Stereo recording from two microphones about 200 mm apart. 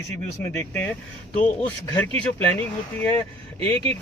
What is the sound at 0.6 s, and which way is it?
Speech, 10° left (ahead or behind).